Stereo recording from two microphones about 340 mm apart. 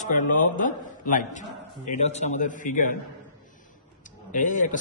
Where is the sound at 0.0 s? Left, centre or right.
Left.